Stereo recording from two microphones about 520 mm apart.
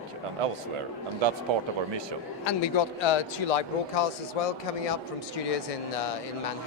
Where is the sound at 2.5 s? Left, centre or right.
Left.